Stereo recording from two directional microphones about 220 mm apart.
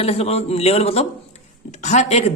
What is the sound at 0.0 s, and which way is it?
Speech, 30° left (ahead or behind).